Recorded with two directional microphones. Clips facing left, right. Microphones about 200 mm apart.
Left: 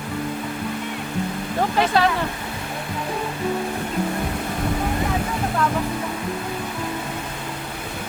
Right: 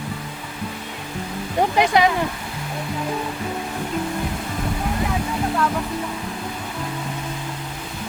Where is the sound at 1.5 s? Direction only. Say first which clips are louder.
Right 2 dB; 15° right (ahead or behind).